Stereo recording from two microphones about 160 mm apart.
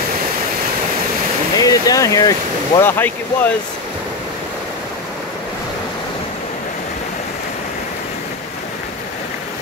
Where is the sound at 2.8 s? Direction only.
15° left (ahead or behind).